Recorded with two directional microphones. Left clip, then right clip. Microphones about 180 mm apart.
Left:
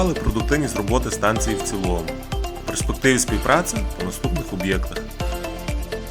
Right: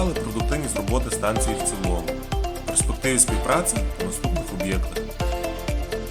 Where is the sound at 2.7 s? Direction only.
25° left (ahead or behind).